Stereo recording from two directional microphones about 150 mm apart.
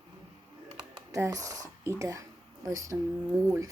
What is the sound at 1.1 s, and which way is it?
Speech, 20° right (ahead or behind).